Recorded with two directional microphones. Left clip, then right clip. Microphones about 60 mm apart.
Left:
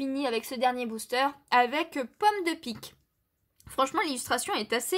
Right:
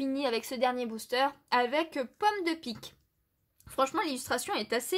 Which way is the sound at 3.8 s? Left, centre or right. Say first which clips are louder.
Left 2 dB; left.